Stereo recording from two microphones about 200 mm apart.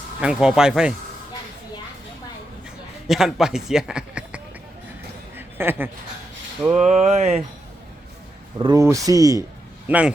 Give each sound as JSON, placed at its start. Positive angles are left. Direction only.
{"t": 0.2, "sound": "a man's voice", "side_deg": -5}
{"t": 3.1, "sound": "a man's voice", "side_deg": 0}
{"t": 5.4, "sound": "a sound", "side_deg": -10}
{"t": 6.6, "sound": "speech", "side_deg": -10}
{"t": 6.8, "sound": "speech", "side_deg": -35}
{"t": 8.5, "sound": "speech", "side_deg": -20}
{"t": 9.8, "sound": "a man's voice", "side_deg": -5}